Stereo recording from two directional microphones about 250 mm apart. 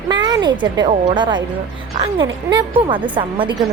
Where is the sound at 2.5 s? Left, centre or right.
Centre.